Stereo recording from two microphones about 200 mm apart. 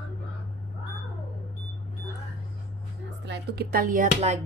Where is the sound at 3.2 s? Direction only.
55° right (ahead or behind); by 4.4 s 35° right (ahead or behind).